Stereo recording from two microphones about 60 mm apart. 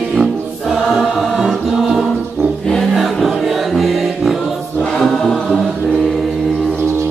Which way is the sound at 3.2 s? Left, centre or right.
Centre.